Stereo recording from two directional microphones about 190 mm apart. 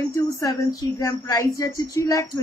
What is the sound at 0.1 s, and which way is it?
Speech, 20° left (ahead or behind).